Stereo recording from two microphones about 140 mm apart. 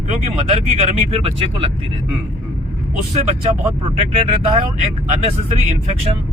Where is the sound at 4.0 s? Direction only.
45° right (ahead or behind).